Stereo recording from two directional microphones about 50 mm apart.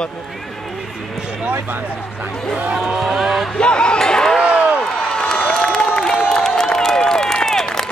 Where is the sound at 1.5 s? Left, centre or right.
Right.